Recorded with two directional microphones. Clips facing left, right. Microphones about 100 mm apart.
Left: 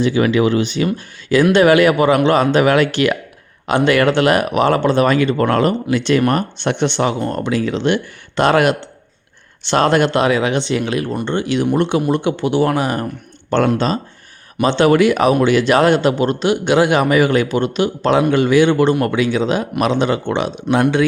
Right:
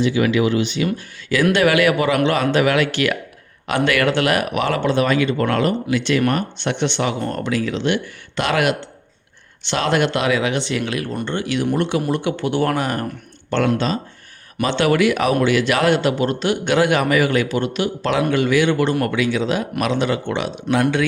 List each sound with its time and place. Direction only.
0.0 s speech: 40° left (ahead or behind)
0.9 s a man's voice: 30° left (ahead or behind)
7.2 s a man's voice: 25° left (ahead or behind)
13.5 s a man's voice: 40° left (ahead or behind)